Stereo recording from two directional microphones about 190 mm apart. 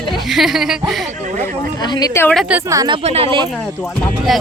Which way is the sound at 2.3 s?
5° right (ahead or behind).